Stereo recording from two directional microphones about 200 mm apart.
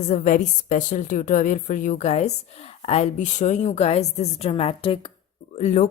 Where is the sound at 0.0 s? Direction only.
35° left (ahead or behind).